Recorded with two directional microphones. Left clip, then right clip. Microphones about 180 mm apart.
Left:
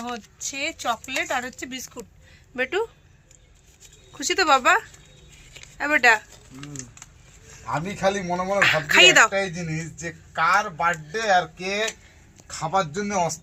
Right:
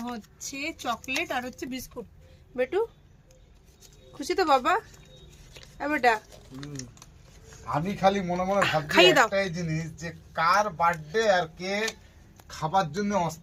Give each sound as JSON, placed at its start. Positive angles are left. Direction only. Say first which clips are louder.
{"t": 0.3, "sound": "speech", "louder": "left 6 dB", "side_deg": 5}
{"t": 4.2, "sound": "speech", "louder": "left 4 dB", "side_deg": -10}
{"t": 6.6, "sound": "speech", "louder": "left 2 dB", "side_deg": -30}
{"t": 7.7, "sound": "a man's voice", "louder": "left 1 dB", "side_deg": 55}
{"t": 8.6, "sound": "speech", "louder": "left 6 dB", "side_deg": -15}
{"t": 9.3, "sound": "a man's voice", "louder": "left 2 dB", "side_deg": 45}